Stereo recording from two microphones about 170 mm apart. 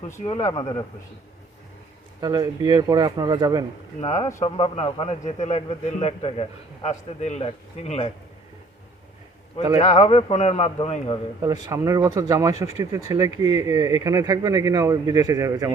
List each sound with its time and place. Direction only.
0.4 s speech: 20° left (ahead or behind)
2.2 s speech: 25° right (ahead or behind)
4.0 s a man's voice: 40° left (ahead or behind)
9.7 s a man's voice: 40° left (ahead or behind)
11.6 s speech: 20° right (ahead or behind)